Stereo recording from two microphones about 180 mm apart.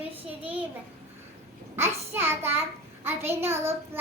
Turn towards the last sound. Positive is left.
turn(degrees=-15)  # may be behind; listen again after turning